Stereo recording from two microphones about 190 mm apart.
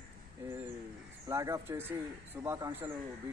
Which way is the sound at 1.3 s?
15° right (ahead or behind).